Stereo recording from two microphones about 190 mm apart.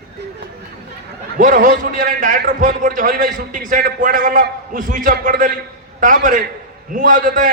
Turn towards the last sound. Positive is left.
turn(degrees=-45)  # may be behind; listen again after turning